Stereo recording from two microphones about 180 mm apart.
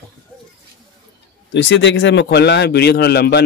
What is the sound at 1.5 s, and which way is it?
A man's voice, 90° left.